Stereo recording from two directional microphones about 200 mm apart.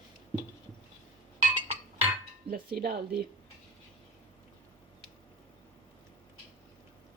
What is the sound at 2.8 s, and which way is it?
Speech, 50° right (ahead or behind).